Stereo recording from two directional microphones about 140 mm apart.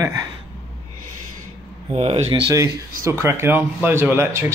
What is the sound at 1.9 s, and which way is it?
Speech, 50° right (ahead or behind).